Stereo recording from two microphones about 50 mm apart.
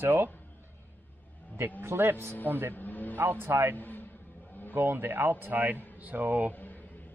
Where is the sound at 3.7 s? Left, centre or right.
Left.